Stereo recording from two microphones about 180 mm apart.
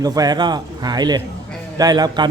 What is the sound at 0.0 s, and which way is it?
Speech, 20° right (ahead or behind).